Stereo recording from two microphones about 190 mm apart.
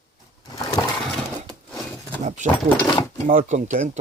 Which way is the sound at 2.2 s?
40° right (ahead or behind).